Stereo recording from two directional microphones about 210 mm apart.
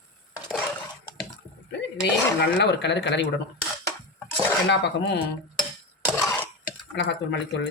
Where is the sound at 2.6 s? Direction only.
55° left (ahead or behind).